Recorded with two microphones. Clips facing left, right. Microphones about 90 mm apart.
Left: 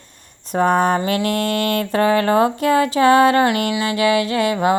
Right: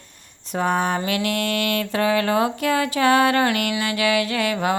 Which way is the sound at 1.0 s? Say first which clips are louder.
Left 4 dB; 35° left (ahead or behind).